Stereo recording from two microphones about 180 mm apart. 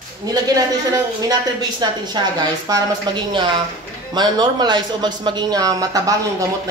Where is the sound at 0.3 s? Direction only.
20° right (ahead or behind).